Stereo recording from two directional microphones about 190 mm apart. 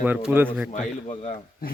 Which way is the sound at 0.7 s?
40° left (ahead or behind).